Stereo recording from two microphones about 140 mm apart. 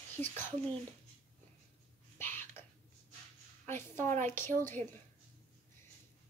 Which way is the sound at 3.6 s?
15° left (ahead or behind).